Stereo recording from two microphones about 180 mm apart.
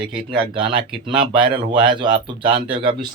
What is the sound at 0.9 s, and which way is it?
Speech, 5° right (ahead or behind).